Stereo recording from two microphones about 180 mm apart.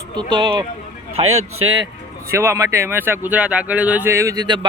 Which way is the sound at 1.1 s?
35° right (ahead or behind).